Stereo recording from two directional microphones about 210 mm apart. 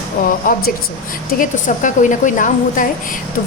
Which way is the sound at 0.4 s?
40° left (ahead or behind).